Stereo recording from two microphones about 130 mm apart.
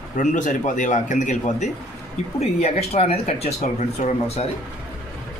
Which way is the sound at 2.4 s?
55° left (ahead or behind).